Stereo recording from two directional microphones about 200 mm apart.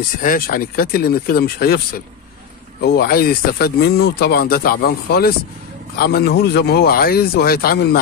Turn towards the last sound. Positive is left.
turn(degrees=50)  # may be behind; listen again after turning